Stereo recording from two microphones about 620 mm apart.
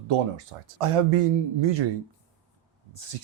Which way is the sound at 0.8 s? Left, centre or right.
Right.